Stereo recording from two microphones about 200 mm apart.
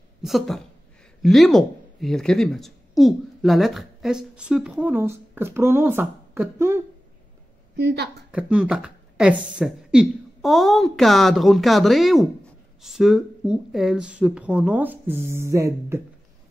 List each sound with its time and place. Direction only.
0.2 s a woman's voice: centre (ahead or behind)
7.8 s a woman's voice: 55° right (ahead or behind)
8.3 s speech: 5° right (ahead or behind)